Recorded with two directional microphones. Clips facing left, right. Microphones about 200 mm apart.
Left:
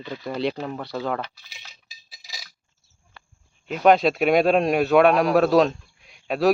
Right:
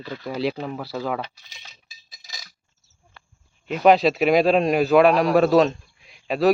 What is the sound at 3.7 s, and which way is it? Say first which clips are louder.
A man's voice: right 1 dB; centre (ahead or behind).